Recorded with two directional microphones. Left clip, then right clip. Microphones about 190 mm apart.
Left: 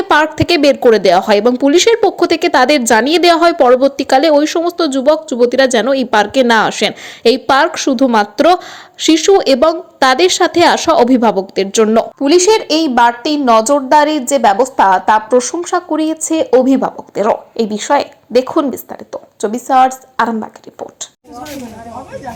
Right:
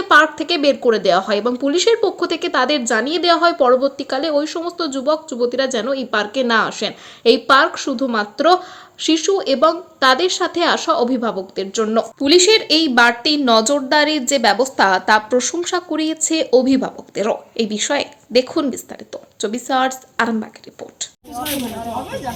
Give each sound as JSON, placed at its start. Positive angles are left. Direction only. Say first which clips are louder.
{"t": 0.0, "sound": "a woman's voice", "louder": "left 1 dB", "side_deg": 30}
{"t": 12.4, "sound": "speech", "louder": "left 2 dB", "side_deg": 10}
{"t": 21.0, "sound": "speech", "louder": "right 2 dB", "side_deg": 15}